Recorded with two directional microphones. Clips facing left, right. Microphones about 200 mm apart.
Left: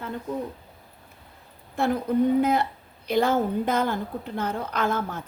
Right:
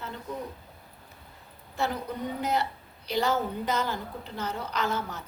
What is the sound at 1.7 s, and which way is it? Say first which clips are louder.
Speech: left 8 dB; 55° left (ahead or behind).